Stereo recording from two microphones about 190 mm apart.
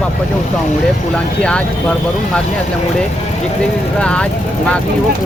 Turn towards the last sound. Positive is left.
turn(degrees=5)  # may be behind; listen again after turning